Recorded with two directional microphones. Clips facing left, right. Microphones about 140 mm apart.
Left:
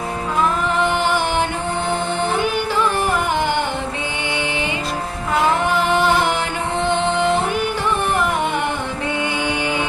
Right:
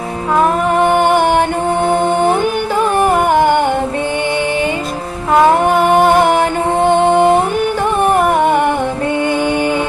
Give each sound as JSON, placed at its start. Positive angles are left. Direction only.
{"t": 0.3, "sound": "music", "side_deg": -50}
{"t": 5.3, "sound": "music", "side_deg": -50}